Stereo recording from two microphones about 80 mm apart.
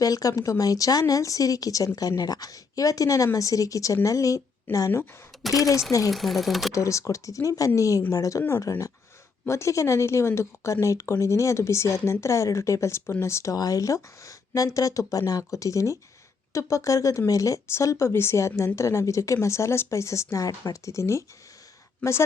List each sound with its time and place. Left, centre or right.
0.0 s a woman's voice: left
5.3 s a sound: centre
6.1 s speech: centre
6.7 s speech: left
13.6 s speech: left